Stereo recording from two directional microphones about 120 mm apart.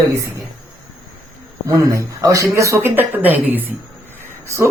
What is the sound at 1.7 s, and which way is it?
A woman's voice, 30° right (ahead or behind).